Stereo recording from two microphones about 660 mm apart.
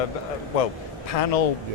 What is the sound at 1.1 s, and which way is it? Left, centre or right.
Speech, left.